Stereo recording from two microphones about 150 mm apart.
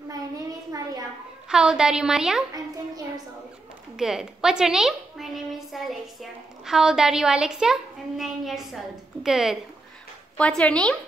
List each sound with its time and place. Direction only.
1.5 s a woman's voice: 5° right (ahead or behind)
3.9 s a sound: 5° right (ahead or behind)
6.6 s a woman's voice: 5° right (ahead or behind)
10.6 s speech: 5° left (ahead or behind)